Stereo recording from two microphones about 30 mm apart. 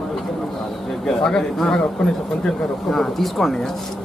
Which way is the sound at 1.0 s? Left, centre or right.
Left.